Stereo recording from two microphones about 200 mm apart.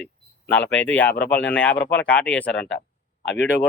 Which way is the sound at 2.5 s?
65° left (ahead or behind).